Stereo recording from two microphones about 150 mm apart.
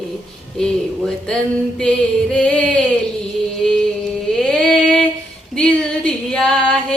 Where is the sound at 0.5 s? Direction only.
5° left (ahead or behind).